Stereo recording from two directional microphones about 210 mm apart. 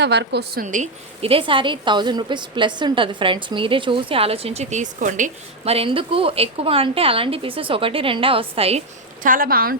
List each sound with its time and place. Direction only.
0.0 s a woman's voice: 55° right (ahead or behind)
0.6 s a woman's voice: 35° right (ahead or behind)
9.2 s a woman's voice: 40° right (ahead or behind)